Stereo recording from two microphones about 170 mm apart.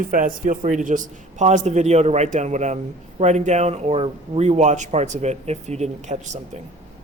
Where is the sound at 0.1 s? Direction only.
50° right (ahead or behind).